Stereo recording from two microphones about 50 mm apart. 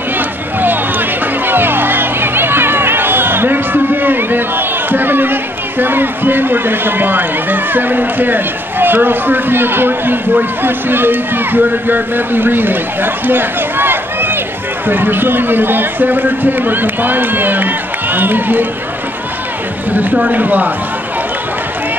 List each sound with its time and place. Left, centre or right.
0.6 s a man's voice: right
20.0 s a man's voice: right